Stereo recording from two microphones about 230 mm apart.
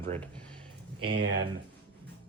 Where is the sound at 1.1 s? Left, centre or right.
Right.